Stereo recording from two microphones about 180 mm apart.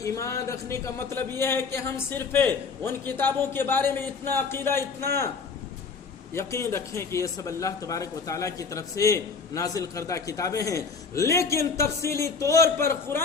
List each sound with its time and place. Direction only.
0.0 s speech: 15° left (ahead or behind)
6.3 s speech: 15° left (ahead or behind)